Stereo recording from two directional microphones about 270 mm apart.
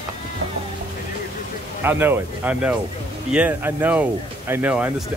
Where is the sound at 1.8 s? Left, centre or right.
Centre.